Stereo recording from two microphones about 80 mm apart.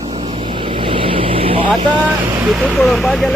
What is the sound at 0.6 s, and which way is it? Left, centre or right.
Vehicle, right.